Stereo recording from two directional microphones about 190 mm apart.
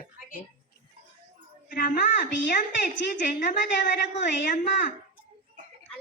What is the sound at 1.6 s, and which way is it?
A woman's voice, 50° left (ahead or behind).